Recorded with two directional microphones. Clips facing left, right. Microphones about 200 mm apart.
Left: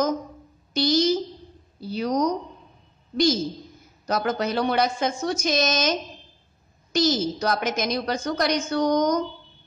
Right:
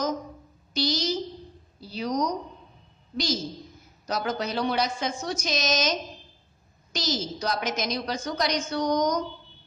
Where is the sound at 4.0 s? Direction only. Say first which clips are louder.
Left 4 dB; 50° left (ahead or behind).